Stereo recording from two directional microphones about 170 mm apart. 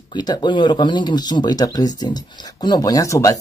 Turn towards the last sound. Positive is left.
turn(degrees=20)  # may be behind; listen again after turning